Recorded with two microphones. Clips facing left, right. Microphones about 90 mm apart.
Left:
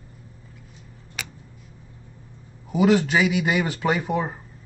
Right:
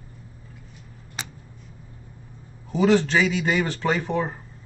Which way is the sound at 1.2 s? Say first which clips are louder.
Even; 30° right (ahead or behind).